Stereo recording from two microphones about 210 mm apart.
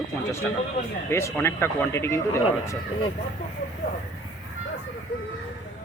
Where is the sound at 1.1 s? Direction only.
10° left (ahead or behind).